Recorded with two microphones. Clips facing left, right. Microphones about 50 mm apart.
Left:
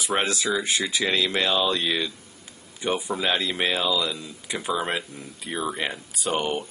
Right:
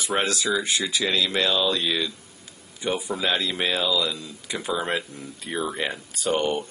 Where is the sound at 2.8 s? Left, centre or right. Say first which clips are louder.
Even; left.